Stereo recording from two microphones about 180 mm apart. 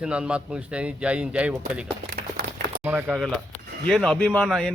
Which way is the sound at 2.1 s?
55° right (ahead or behind).